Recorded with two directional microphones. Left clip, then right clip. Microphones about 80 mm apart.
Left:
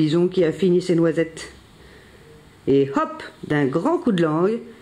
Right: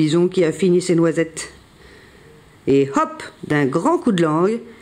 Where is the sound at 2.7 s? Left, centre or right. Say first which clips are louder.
Right 2 dB; right.